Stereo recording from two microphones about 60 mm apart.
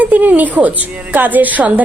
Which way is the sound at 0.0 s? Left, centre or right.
Right.